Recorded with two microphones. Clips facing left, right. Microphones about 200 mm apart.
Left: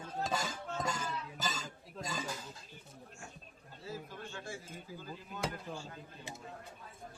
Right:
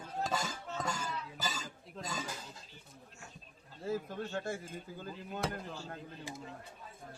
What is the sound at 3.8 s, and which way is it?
Speech, 50° right (ahead or behind).